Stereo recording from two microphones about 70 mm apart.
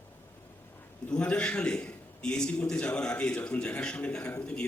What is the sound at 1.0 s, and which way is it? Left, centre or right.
A man's voice, centre.